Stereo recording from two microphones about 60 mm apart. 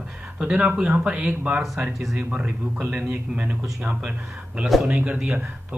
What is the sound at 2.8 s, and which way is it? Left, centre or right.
Speech, right.